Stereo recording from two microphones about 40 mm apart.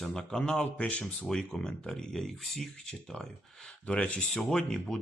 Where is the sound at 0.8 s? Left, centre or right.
Left.